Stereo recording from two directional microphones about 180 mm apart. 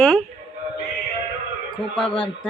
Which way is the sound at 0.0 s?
Centre (ahead or behind).